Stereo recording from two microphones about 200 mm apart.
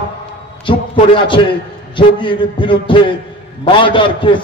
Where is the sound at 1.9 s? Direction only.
25° left (ahead or behind).